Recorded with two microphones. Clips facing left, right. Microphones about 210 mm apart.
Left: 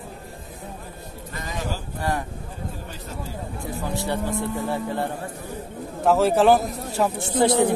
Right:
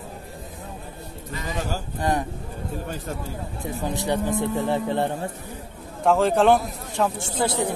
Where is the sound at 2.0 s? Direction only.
20° right (ahead or behind).